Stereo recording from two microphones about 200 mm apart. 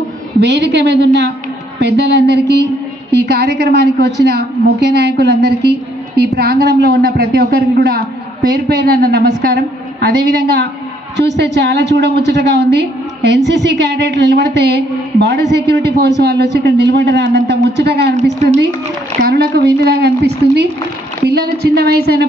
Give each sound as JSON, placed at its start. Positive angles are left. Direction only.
{"t": 0.4, "sound": "a woman's voice", "side_deg": -55}
{"t": 19.2, "sound": "a woman's voice", "side_deg": -55}